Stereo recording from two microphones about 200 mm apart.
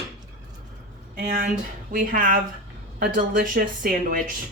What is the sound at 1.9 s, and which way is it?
Speech, 40° right (ahead or behind).